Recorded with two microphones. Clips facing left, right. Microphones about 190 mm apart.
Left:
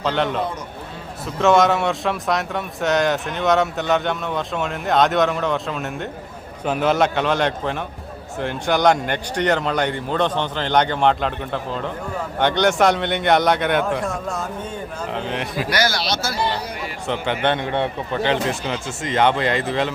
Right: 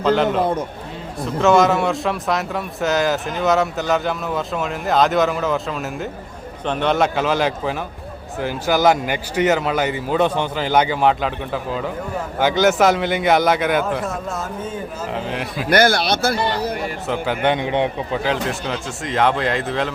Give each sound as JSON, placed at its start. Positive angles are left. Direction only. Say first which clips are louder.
{"t": 0.0, "sound": "a man's voice", "louder": "right 5 dB", "side_deg": 0}
{"t": 15.7, "sound": "speech", "louder": "right 8 dB", "side_deg": -55}
{"t": 17.1, "sound": "a man's voice", "louder": "right 1 dB", "side_deg": -5}
{"t": 18.2, "sound": "a man's voice", "louder": "left 4 dB", "side_deg": 0}